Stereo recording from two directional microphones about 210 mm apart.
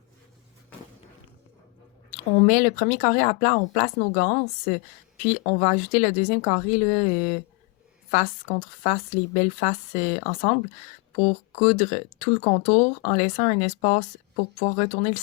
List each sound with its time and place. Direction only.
2.0 s speech: 35° left (ahead or behind)